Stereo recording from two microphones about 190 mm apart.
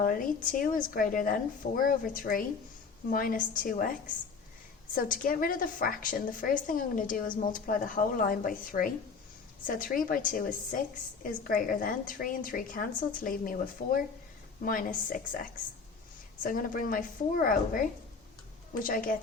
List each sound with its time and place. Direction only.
0.0 s a woman's voice: 45° left (ahead or behind)
4.9 s a woman's voice: 45° left (ahead or behind)
16.4 s a woman's voice: 45° left (ahead or behind)